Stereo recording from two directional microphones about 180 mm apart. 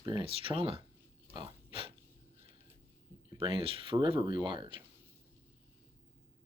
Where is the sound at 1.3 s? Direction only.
30° right (ahead or behind).